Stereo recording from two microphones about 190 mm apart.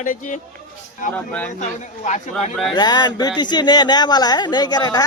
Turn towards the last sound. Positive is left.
turn(degrees=20)  # may be behind; listen again after turning